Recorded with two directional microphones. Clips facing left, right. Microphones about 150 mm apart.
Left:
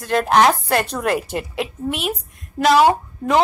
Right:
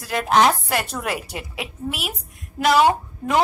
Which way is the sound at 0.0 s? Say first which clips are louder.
Left 3 dB; 5° right (ahead or behind).